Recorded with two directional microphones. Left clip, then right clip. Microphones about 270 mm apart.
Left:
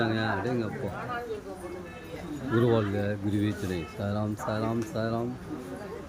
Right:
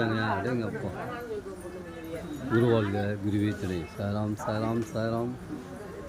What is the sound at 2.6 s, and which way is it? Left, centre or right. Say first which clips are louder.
Speech: even; centre.